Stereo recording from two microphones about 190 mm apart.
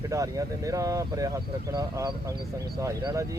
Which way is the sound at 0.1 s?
15° right (ahead or behind).